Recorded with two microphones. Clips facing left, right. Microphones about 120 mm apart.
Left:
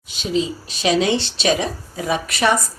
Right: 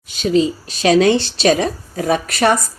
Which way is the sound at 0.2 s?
50° right (ahead or behind).